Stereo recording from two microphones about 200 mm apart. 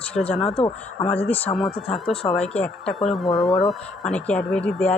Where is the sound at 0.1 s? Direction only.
30° left (ahead or behind).